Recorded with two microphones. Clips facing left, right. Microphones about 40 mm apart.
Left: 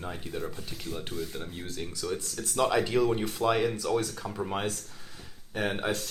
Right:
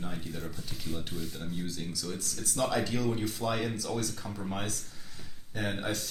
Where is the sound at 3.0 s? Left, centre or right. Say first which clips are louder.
Left 5 dB; left.